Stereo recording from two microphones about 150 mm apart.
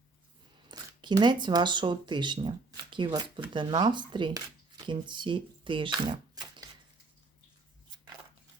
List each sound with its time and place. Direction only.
0.7 s speech: 30° right (ahead or behind)